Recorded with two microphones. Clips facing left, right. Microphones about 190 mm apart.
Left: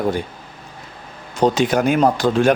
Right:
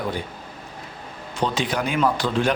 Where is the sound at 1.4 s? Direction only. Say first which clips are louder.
Left 8 dB; 45° left (ahead or behind).